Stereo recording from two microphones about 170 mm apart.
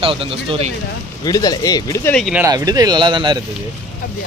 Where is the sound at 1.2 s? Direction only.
20° left (ahead or behind).